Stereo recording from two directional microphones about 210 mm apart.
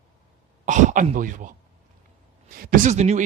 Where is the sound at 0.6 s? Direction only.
35° right (ahead or behind).